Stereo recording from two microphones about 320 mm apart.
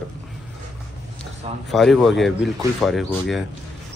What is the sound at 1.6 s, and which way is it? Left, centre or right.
A man's voice, centre.